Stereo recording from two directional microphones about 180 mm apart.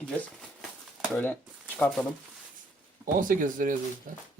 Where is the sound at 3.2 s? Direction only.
50° right (ahead or behind).